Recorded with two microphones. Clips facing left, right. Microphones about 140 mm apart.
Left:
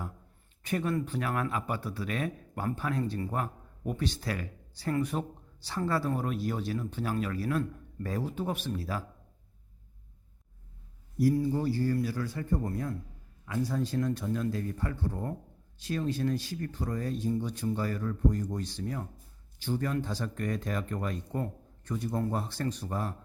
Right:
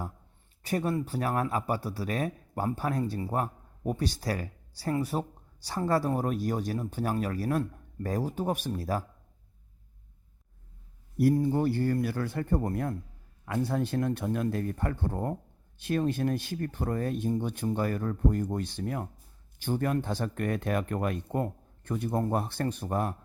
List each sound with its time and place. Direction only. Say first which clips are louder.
0.6 s speech: right 1 dB; 35° right (ahead or behind)
11.2 s speech: right 2 dB; 55° right (ahead or behind)